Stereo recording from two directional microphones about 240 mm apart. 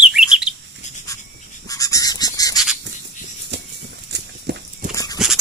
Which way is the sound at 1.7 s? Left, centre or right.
Centre.